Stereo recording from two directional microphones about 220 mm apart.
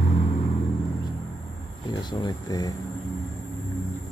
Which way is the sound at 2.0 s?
20° left (ahead or behind).